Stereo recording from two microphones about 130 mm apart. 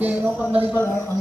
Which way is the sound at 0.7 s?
20° left (ahead or behind).